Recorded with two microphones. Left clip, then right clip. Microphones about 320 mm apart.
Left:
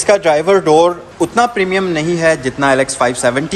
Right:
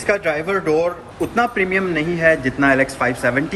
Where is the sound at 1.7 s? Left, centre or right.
Centre.